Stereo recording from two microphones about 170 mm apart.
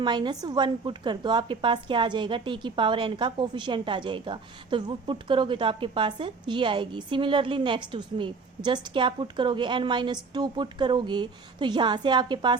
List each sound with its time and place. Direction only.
0.0 s a woman's voice: 25° right (ahead or behind)